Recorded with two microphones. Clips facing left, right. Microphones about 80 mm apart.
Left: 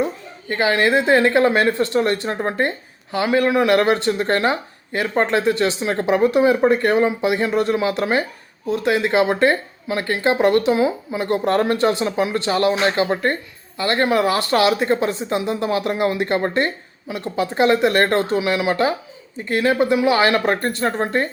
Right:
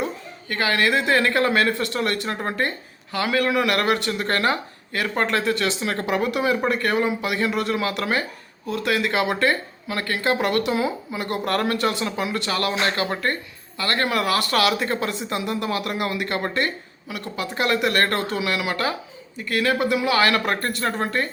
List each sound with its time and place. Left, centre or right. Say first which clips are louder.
0.0 s a woman's voice: left 5 dB; left